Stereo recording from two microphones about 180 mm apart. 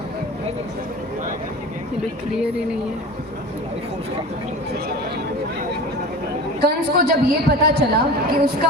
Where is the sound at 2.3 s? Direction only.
5° right (ahead or behind).